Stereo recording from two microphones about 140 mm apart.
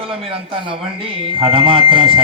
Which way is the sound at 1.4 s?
40° right (ahead or behind).